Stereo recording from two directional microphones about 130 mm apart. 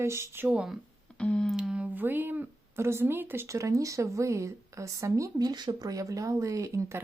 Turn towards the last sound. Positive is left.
turn(degrees=-25)  # may be behind; listen again after turning